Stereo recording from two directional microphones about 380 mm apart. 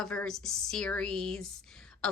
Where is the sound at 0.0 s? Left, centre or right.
Centre.